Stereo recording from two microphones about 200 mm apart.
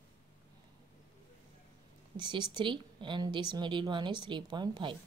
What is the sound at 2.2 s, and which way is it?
A woman's voice, 20° right (ahead or behind).